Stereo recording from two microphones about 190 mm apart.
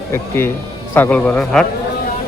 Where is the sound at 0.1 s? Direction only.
15° left (ahead or behind).